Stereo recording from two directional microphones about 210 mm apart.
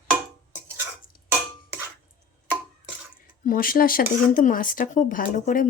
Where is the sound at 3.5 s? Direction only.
40° left (ahead or behind).